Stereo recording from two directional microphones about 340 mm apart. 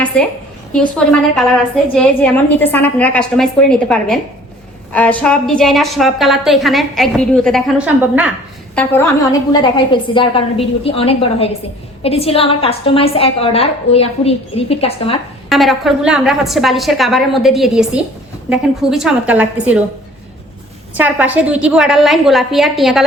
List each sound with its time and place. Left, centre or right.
0.1 s a woman's voice: centre
15.4 s a woman's voice: centre
20.9 s a woman's voice: centre